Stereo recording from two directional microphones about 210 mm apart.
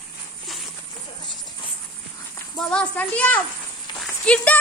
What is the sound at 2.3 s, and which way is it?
A child's voice, 5° left (ahead or behind).